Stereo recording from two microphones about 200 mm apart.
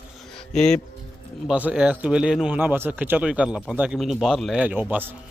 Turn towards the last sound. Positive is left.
turn(degrees=-10)  # may be behind; listen again after turning